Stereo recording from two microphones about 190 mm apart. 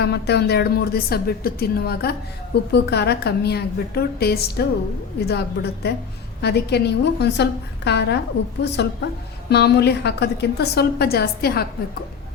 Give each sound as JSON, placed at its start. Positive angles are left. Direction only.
{"t": 0.0, "sound": "a woman's voice", "side_deg": 60}